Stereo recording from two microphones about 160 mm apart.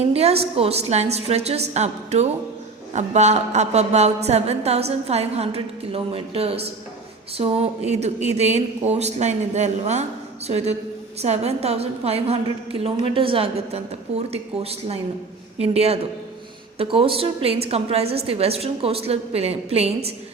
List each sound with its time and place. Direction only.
0.0 s a woman's voice: 40° right (ahead or behind)